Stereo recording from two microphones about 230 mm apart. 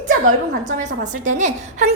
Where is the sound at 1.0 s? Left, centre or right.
Right.